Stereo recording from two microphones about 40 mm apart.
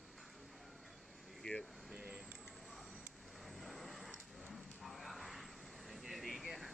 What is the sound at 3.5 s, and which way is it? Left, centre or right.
Vehicle, centre.